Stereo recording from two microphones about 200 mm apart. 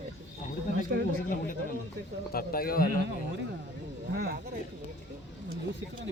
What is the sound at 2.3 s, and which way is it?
Speech, 45° left (ahead or behind).